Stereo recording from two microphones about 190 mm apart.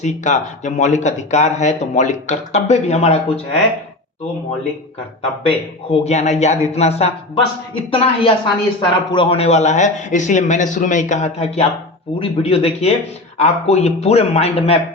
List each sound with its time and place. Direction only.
0.0 s speech: 40° left (ahead or behind)
5.5 s speech: 30° left (ahead or behind)